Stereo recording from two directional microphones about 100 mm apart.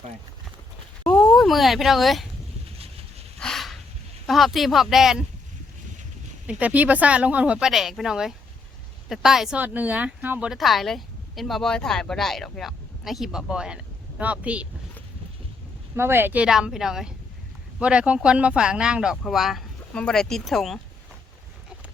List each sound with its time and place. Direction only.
1.0 s a sound: 15° left (ahead or behind)
1.5 s speech: centre (ahead or behind)
3.4 s a sound: centre (ahead or behind)
4.3 s speech: centre (ahead or behind)
6.5 s speech: 15° right (ahead or behind)
9.6 s speech: 15° right (ahead or behind)
10.5 s speech: centre (ahead or behind)
16.0 s speech: 25° right (ahead or behind)
16.5 s speech: 5° right (ahead or behind)
19.9 s speech: 10° left (ahead or behind)